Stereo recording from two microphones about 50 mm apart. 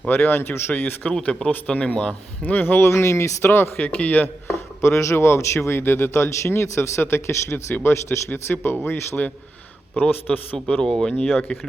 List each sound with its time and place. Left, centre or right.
0.1 s a man's voice: left
1.2 s a man's voice: left
2.8 s speech: left
3.4 s a man's voice: left
3.8 s a man's voice: left
4.4 s a man's voice: left
10.0 s a man's voice: left
10.8 s speech: centre